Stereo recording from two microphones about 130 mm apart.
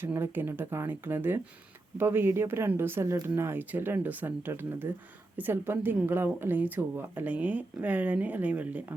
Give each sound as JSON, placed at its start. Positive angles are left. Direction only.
{"t": 0.0, "sound": "speech", "side_deg": -15}